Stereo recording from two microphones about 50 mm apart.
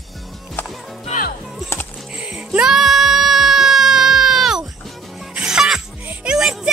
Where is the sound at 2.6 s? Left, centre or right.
Centre.